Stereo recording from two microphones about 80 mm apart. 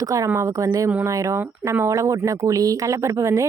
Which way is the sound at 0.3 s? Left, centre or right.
Right.